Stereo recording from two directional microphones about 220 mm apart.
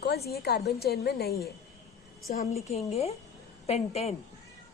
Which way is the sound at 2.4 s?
30° left (ahead or behind).